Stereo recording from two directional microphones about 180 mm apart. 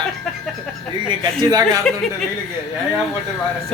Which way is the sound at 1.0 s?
20° right (ahead or behind).